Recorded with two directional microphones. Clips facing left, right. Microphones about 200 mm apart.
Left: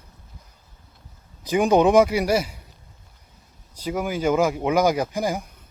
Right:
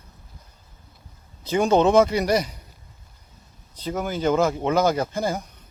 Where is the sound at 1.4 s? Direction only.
15° left (ahead or behind).